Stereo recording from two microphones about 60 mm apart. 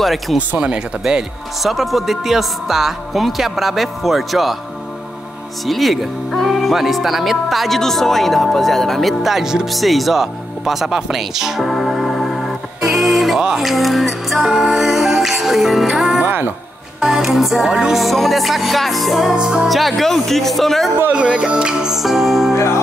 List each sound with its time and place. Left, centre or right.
0.0 s speech: centre
0.4 s speech: right
1.6 s speech: centre
5.7 s speech: centre
13.4 s music: centre
17.0 s speech: centre
19.3 s speech: centre
19.7 s speech: centre
21.1 s speech: centre